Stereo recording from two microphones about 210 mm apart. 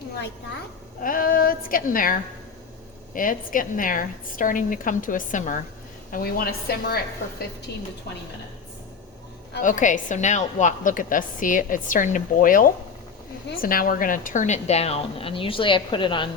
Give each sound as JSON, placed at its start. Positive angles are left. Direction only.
{"t": 1.0, "sound": "a woman's voice", "side_deg": 40}
{"t": 9.6, "sound": "a woman's voice", "side_deg": 40}